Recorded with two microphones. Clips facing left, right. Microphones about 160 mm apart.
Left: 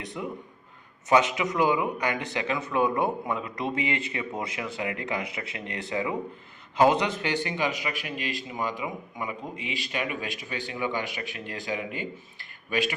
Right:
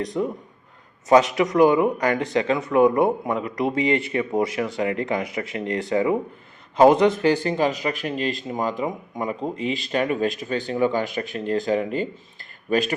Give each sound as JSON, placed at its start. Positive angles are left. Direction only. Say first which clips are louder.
{"t": 0.0, "sound": "speech", "louder": "right 10 dB", "side_deg": -40}
{"t": 1.8, "sound": "speech", "louder": "right 8 dB", "side_deg": -35}